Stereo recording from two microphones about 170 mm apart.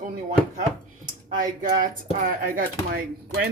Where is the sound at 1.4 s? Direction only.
55° right (ahead or behind).